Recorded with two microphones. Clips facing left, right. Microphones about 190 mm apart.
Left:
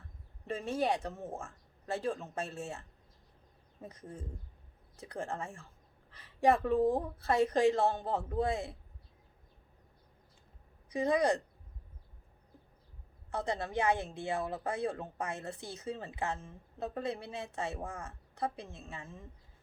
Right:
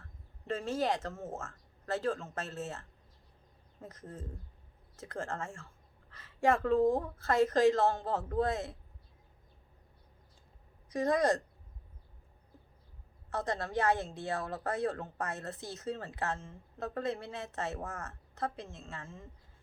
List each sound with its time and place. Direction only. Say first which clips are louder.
0.4 s speech: even; 15° left (ahead or behind)
10.9 s speech: even; 15° left (ahead or behind)
13.3 s speech: even; 15° left (ahead or behind)